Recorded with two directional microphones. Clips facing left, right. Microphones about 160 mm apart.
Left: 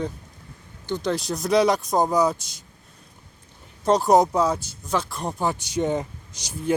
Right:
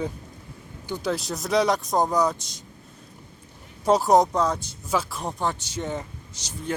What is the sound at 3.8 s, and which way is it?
Speech, 5° right (ahead or behind).